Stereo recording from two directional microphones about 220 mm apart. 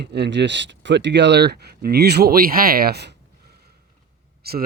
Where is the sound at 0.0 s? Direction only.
50° right (ahead or behind).